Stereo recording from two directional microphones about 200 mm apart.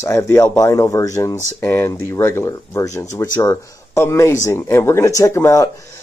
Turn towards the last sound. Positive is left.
turn(degrees=15)  # may be behind; listen again after turning